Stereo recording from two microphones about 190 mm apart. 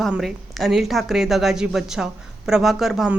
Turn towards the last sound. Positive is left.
turn(degrees=-5)  # may be behind; listen again after turning